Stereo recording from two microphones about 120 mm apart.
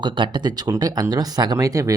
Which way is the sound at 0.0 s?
40° right (ahead or behind).